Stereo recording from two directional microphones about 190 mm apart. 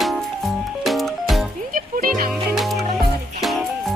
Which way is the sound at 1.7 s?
45° right (ahead or behind).